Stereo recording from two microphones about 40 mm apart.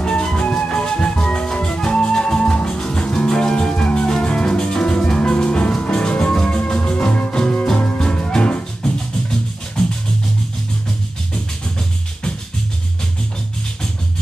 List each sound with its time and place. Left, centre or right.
0.0 s music: left